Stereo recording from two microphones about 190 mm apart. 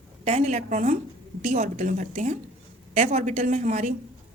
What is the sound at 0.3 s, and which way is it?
A woman's voice, 35° right (ahead or behind).